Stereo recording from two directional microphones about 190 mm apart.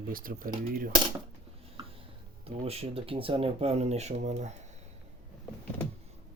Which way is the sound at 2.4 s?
30° right (ahead or behind).